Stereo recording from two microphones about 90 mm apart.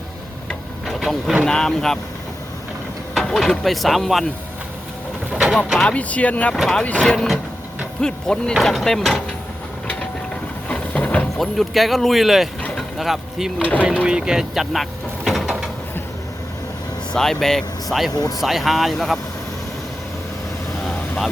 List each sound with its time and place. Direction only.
0.9 s vehicle: centre (ahead or behind)
1.5 s speech: 5° left (ahead or behind)
3.2 s speech: 5° left (ahead or behind)
5.3 s vehicle: 10° right (ahead or behind)
5.8 s speech: 15° left (ahead or behind)
10.7 s music: 15° left (ahead or behind)
11.3 s speech: centre (ahead or behind)
12.6 s a sound: centre (ahead or behind)
13.6 s speech: 20° left (ahead or behind)
14.0 s vehicle: 10° right (ahead or behind)
17.2 s speech: 5° left (ahead or behind)
18.1 s speech: 45° left (ahead or behind)
18.3 s speech: centre (ahead or behind)